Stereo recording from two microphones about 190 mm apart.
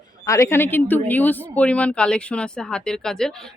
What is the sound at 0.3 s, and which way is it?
Speech, 15° left (ahead or behind).